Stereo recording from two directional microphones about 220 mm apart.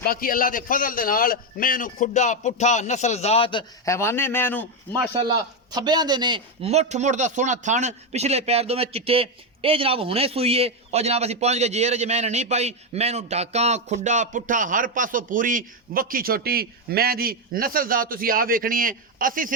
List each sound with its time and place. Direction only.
0.0 s a man's voice: 40° left (ahead or behind); by 3.6 s 25° left (ahead or behind)
3.8 s a man's voice: 10° left (ahead or behind)
5.1 s speech: 20° right (ahead or behind); by 19.5 s 40° right (ahead or behind)